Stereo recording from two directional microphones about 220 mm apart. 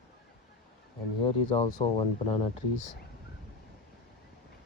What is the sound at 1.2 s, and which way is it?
Speech, 20° left (ahead or behind).